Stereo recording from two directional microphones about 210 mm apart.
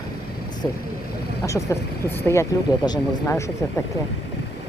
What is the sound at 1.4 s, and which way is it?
Speech, 15° left (ahead or behind).